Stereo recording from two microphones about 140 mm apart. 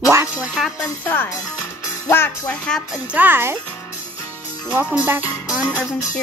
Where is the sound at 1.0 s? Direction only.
15° left (ahead or behind).